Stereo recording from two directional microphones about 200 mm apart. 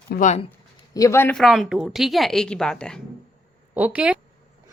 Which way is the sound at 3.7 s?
10° right (ahead or behind).